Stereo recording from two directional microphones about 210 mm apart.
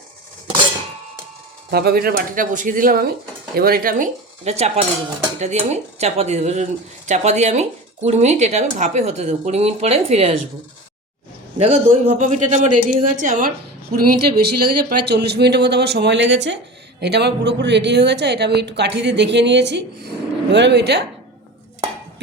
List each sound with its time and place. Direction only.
1.7 s a woman's voice: 50° right (ahead or behind); by 10.3 s 30° right (ahead or behind)
11.5 s a woman's voice: 30° right (ahead or behind); by 21.0 s 50° right (ahead or behind)